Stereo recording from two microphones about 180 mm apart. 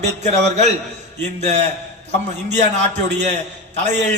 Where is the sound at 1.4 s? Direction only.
40° right (ahead or behind).